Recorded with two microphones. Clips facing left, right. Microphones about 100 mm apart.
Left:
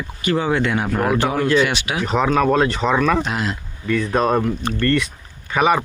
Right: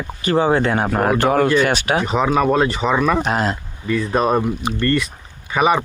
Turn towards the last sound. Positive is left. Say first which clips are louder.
# right 1 dB
turn(degrees=0)  # may be behind; listen again after turning